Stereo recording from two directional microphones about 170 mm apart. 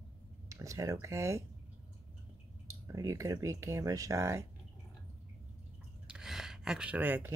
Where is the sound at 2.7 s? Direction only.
15° right (ahead or behind).